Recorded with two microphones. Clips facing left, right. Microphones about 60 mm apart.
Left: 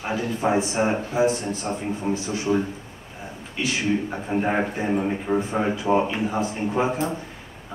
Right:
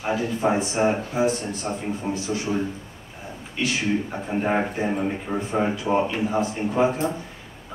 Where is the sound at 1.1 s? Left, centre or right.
Left.